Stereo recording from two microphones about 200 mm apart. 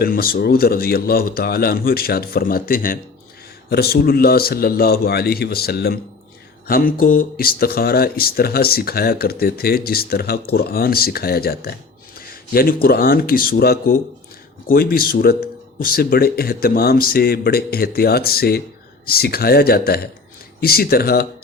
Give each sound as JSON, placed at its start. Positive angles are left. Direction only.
{"t": 0.0, "sound": "speech", "side_deg": 45}